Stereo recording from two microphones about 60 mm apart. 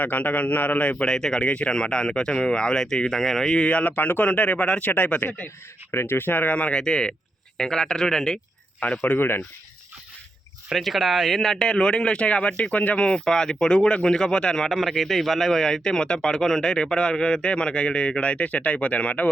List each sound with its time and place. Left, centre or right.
0.0 s a man's voice: left
1.0 s speech: centre; by 5.5 s left
5.9 s speech: left; by 8.4 s centre
9.0 s speech: left
10.7 s speech: centre; by 19.3 s left